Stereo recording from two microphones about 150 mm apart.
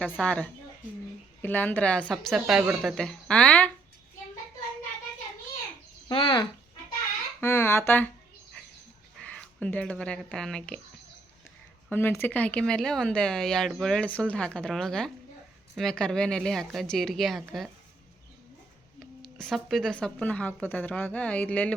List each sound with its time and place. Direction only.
0.0 s speech: 5° left (ahead or behind)
2.2 s speech: 5° right (ahead or behind)
6.1 s speech: 35° left (ahead or behind)
7.4 s speech: 15° left (ahead or behind)
9.1 s speech: 5° left (ahead or behind)
11.9 s speech: 15° left (ahead or behind)
18.9 s speech: 5° left (ahead or behind)